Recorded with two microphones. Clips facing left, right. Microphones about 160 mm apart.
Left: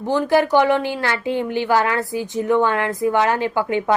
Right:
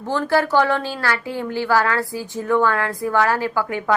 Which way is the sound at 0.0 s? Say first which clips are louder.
Left 3 dB; 15° left (ahead or behind).